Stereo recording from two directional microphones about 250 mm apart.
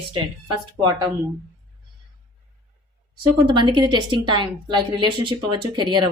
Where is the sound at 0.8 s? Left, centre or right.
Centre.